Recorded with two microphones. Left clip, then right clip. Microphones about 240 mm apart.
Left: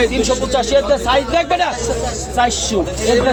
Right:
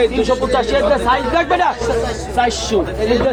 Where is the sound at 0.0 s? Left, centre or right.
Left.